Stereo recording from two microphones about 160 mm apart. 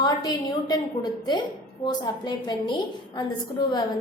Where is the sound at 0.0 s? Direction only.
25° left (ahead or behind).